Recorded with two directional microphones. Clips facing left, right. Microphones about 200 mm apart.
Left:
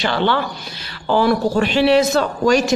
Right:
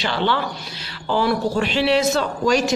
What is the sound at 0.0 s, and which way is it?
Speech, 55° left (ahead or behind).